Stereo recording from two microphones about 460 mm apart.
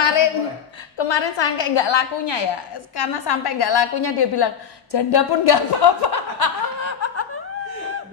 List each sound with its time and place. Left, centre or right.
0.0 s a sound: left
0.9 s a woman's voice: left
6.8 s snicker: left